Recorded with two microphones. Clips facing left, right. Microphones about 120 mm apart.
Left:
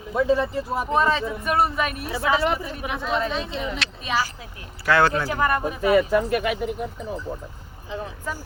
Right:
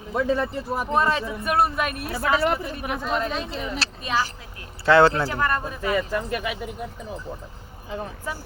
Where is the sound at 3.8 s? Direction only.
35° right (ahead or behind).